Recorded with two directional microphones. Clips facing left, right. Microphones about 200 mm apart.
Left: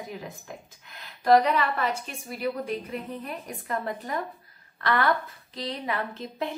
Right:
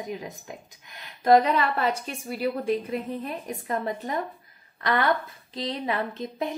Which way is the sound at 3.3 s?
20° right (ahead or behind).